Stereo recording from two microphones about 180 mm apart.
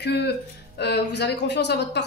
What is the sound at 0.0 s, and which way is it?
Speech, 70° left (ahead or behind).